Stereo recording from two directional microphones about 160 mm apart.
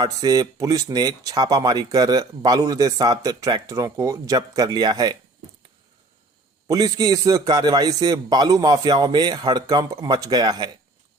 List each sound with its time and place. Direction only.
0.0 s speech: 25° right (ahead or behind)
6.7 s speech: 20° right (ahead or behind)